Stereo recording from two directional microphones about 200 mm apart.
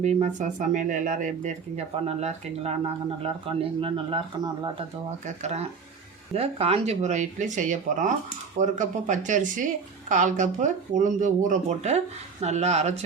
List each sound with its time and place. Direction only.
0.0 s speech: 35° right (ahead or behind)
5.2 s speech: 35° right (ahead or behind)